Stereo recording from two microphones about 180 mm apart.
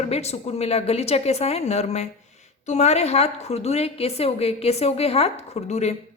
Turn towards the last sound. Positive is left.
turn(degrees=40)  # may be behind; listen again after turning